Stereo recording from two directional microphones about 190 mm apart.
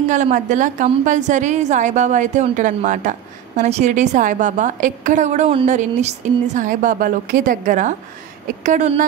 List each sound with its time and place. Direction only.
0.1 s a woman's voice: 40° right (ahead or behind)